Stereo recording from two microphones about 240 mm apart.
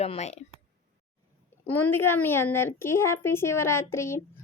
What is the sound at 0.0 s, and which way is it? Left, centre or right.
Speech, left.